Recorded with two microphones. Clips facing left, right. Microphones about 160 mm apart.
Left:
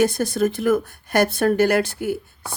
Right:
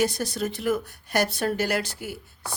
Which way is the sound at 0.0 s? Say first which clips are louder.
Left 7 dB; 50° left (ahead or behind).